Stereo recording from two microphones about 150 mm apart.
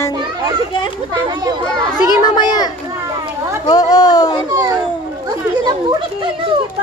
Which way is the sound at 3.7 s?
25° left (ahead or behind).